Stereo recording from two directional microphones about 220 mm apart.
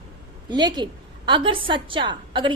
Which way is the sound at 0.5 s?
20° right (ahead or behind).